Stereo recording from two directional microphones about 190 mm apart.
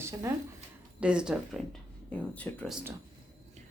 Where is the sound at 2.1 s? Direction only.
5° left (ahead or behind).